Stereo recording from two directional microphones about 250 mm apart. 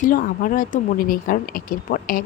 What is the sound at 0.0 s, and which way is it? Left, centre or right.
Speech, left.